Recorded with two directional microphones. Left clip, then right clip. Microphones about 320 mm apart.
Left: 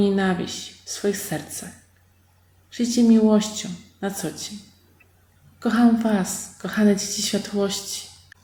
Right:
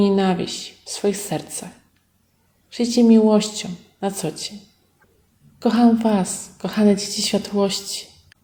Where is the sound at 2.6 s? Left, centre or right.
Centre.